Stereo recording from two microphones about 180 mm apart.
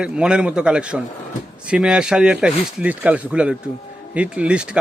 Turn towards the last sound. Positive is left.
turn(degrees=-5)  # may be behind; listen again after turning